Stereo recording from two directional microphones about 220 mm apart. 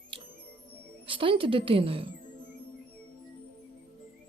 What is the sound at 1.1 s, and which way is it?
A woman's voice, 25° right (ahead or behind).